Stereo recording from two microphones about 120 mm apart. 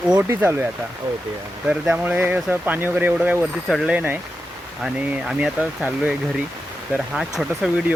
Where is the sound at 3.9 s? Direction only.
10° right (ahead or behind).